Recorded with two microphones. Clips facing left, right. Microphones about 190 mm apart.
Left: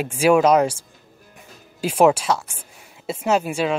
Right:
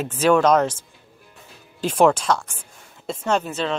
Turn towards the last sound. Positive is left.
turn(degrees=10)  # may be behind; listen again after turning